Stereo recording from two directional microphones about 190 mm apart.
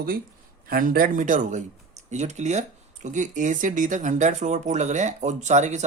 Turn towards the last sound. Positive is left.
turn(degrees=-40)  # may be behind; listen again after turning